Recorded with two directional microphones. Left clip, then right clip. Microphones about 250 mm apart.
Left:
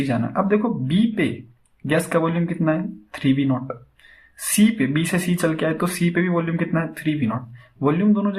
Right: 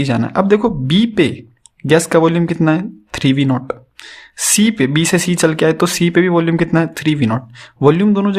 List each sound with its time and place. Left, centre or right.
0.0 s speech: right